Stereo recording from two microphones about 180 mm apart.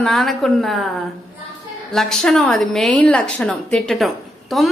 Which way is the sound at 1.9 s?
Centre (ahead or behind).